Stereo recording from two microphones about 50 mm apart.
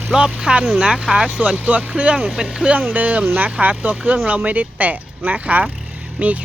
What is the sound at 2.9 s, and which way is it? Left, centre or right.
Speech, right.